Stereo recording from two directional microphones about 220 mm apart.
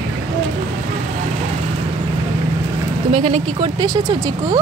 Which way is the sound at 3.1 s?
25° right (ahead or behind).